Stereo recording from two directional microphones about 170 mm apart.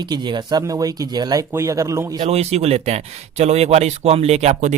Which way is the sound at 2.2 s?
40° right (ahead or behind).